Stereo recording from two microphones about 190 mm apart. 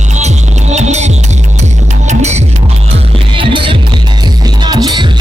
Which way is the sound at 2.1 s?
35° right (ahead or behind).